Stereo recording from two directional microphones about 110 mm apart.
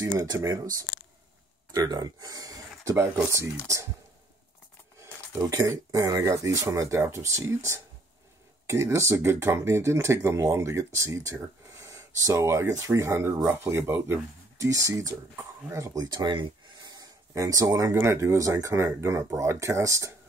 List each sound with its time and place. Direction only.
0.0 s speech: 30° right (ahead or behind)
4.9 s speech: 30° right (ahead or behind)